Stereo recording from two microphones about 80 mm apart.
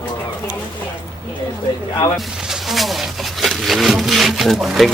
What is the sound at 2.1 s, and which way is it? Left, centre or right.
Speech, centre.